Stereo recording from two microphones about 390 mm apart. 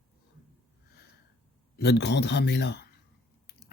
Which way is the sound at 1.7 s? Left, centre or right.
Left.